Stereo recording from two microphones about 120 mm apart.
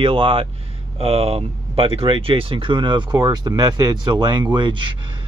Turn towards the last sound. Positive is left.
turn(degrees=-40)  # may be behind; listen again after turning